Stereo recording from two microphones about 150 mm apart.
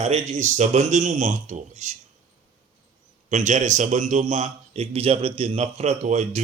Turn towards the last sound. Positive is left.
turn(degrees=-45)  # may be behind; listen again after turning